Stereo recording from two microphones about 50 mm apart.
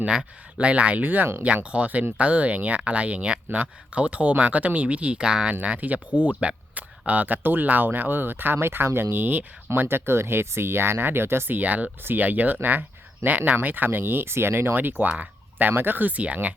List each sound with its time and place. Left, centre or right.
0.6 s speech: right
5.6 s speech: right
9.8 s speech: right
11.6 s speech: right